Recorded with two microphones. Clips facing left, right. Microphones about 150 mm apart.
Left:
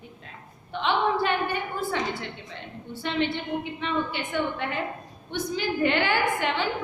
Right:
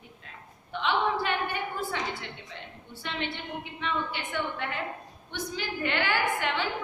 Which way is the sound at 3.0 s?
30° left (ahead or behind).